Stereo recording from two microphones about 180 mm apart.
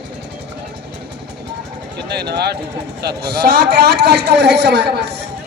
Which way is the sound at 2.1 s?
65° right (ahead or behind).